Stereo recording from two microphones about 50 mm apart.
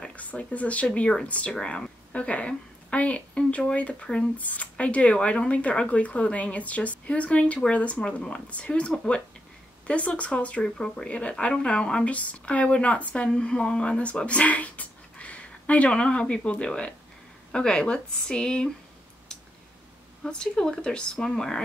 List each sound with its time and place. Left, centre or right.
0.0 s a woman's voice: left
4.4 s speech: left
10.6 s a woman's voice: centre
20.2 s a woman's voice: centre